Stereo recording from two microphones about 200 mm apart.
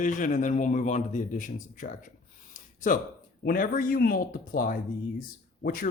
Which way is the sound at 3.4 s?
45° left (ahead or behind).